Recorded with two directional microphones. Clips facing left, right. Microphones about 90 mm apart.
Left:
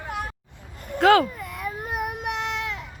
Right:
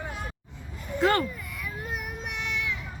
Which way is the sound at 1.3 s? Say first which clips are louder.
Left 6 dB; 50° left (ahead or behind).